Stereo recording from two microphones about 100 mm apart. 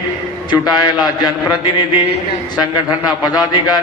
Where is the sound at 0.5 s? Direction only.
45° left (ahead or behind).